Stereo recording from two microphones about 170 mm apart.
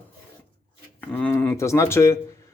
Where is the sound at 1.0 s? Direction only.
10° left (ahead or behind).